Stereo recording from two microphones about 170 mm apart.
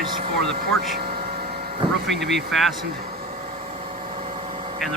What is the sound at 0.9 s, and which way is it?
Vehicle, 65° right (ahead or behind).